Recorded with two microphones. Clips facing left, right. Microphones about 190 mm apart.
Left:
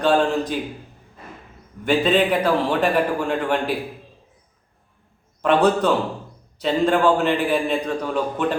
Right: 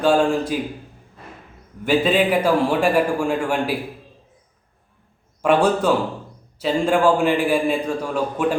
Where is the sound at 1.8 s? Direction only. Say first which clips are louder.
Even; 5° right (ahead or behind).